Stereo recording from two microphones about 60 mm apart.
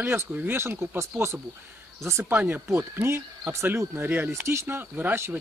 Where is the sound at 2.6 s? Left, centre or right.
Right.